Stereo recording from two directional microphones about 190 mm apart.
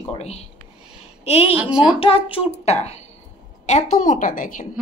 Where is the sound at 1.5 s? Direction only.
5° right (ahead or behind).